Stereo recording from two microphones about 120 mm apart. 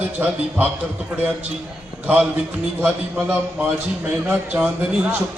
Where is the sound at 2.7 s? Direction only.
20° right (ahead or behind).